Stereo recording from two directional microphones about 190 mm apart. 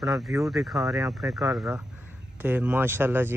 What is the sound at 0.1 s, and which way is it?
Speech, 15° right (ahead or behind).